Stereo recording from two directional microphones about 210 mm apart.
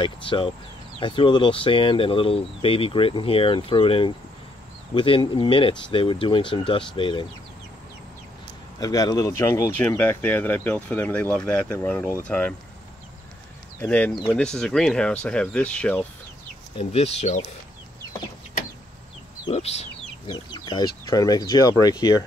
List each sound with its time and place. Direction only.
0.0 s speech: 25° left (ahead or behind)
8.7 s speech: 15° left (ahead or behind)
13.7 s speech: 5° left (ahead or behind)
16.7 s speech: 30° left (ahead or behind)
19.5 s chicken: 30° left (ahead or behind)
20.3 s speech: 20° left (ahead or behind)